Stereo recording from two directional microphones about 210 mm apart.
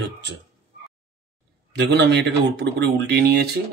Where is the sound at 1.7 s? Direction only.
55° right (ahead or behind).